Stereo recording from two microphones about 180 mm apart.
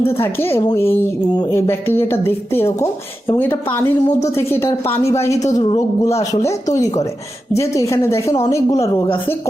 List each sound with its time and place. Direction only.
0.0 s a woman's voice: 15° left (ahead or behind)
7.5 s a woman's voice: 15° left (ahead or behind)